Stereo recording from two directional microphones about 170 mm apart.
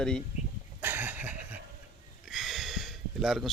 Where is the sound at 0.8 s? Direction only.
10° right (ahead or behind).